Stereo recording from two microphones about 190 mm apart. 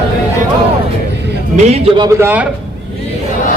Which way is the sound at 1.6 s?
35° right (ahead or behind).